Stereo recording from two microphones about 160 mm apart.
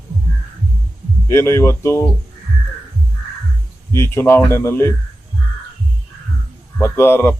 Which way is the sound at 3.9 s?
15° left (ahead or behind).